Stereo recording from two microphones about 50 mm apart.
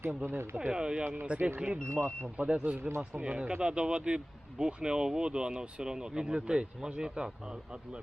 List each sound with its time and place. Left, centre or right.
0.2 s speech: right
0.7 s speech: centre
1.1 s speech: right
1.5 s speech: right
1.8 s speech: right
2.0 s speech: right